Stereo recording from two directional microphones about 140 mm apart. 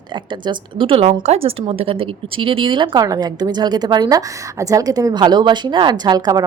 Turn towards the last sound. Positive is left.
turn(degrees=-30)  # may be behind; listen again after turning